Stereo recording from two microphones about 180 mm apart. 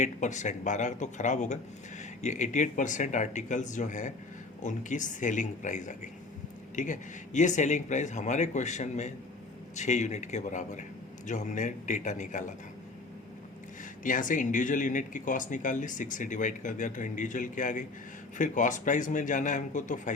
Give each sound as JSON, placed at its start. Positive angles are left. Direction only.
{"t": 0.0, "sound": "speech", "side_deg": 40}
{"t": 14.0, "sound": "speech", "side_deg": 45}